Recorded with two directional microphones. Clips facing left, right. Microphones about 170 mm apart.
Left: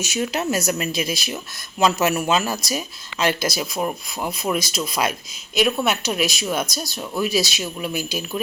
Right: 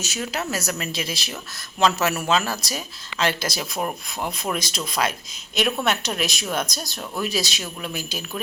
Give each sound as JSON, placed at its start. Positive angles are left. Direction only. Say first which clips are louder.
{"t": 0.0, "sound": "speech", "louder": "left 5 dB", "side_deg": 15}